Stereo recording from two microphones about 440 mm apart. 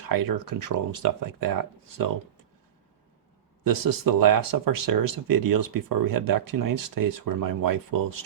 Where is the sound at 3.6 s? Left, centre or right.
Right.